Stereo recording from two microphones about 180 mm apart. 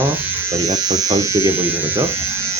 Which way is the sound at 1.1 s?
15° right (ahead or behind).